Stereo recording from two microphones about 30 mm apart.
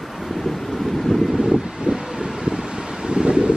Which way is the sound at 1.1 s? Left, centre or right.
Left.